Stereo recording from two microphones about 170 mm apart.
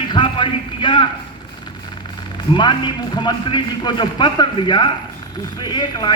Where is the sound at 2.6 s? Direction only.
25° left (ahead or behind).